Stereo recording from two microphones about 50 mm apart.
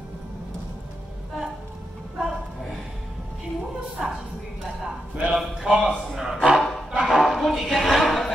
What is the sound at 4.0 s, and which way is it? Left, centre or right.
Speech, centre.